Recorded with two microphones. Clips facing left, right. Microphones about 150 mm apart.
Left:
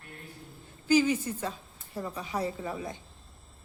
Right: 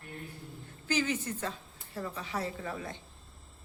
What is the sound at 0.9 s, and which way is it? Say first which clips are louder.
Speech: left 7 dB; 10° left (ahead or behind).